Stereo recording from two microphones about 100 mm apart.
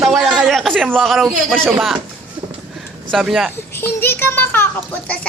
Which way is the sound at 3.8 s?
20° left (ahead or behind).